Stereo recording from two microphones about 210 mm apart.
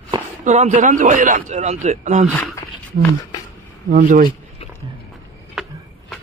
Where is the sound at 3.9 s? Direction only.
40° right (ahead or behind).